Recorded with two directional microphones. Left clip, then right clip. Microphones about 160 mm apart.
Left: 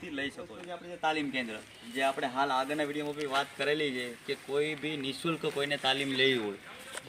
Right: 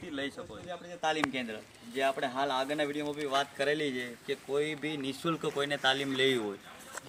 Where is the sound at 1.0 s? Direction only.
25° right (ahead or behind).